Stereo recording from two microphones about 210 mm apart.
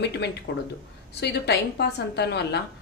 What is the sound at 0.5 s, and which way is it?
A woman's voice, 50° left (ahead or behind).